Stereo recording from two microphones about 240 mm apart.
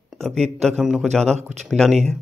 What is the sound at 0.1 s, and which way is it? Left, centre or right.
Speech, centre.